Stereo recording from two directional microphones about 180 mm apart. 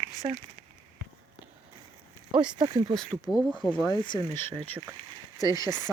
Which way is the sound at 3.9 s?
25° left (ahead or behind).